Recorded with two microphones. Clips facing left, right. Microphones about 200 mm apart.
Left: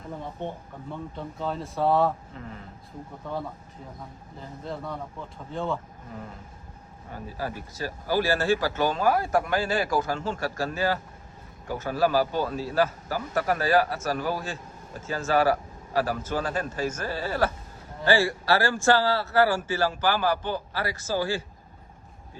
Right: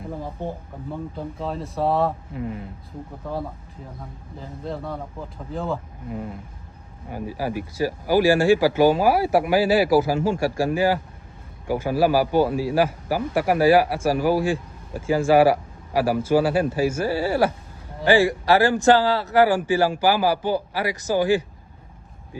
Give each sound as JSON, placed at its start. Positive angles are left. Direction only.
{"t": 0.4, "sound": "speech", "side_deg": -35}
{"t": 1.4, "sound": "speech", "side_deg": 0}
{"t": 2.3, "sound": "a man's voice", "side_deg": -15}
{"t": 3.2, "sound": "speech", "side_deg": 0}
{"t": 7.1, "sound": "a man's voice", "side_deg": -10}